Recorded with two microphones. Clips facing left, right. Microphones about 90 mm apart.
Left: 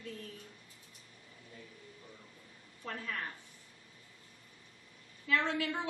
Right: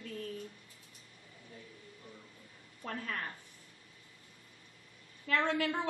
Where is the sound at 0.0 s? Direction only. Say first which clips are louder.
Right 3 dB; 45° right (ahead or behind).